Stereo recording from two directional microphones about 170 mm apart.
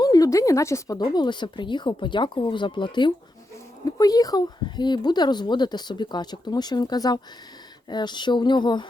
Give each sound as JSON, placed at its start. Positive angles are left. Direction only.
{"t": 0.0, "sound": "speech", "side_deg": 20}